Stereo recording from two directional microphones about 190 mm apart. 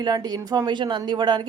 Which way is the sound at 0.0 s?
20° right (ahead or behind).